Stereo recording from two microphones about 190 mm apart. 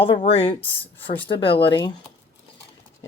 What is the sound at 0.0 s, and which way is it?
Speech, 30° left (ahead or behind).